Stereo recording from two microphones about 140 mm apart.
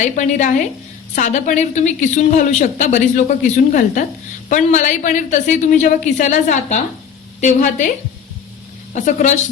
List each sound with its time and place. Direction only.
0.0 s a woman's voice: 60° left (ahead or behind)